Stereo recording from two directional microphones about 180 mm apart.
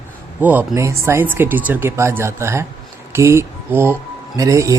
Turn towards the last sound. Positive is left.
turn(degrees=-15)  # may be behind; listen again after turning